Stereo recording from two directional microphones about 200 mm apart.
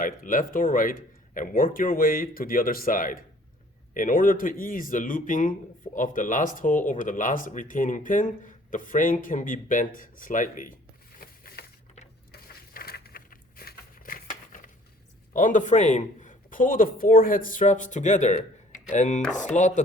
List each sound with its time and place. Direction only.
0.0 s a man's voice: 40° left (ahead or behind)
11.2 s a sound: 45° left (ahead or behind)
15.3 s speech: 40° left (ahead or behind)